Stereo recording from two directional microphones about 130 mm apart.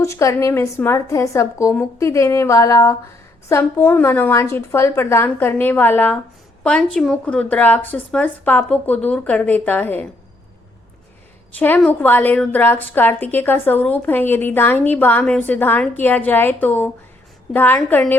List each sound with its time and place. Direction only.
0.0 s a woman's voice: 25° left (ahead or behind)
11.5 s speech: 15° left (ahead or behind)